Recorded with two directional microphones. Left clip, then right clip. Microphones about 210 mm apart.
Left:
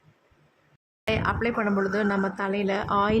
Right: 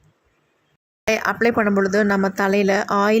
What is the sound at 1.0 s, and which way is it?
Speech, 20° right (ahead or behind).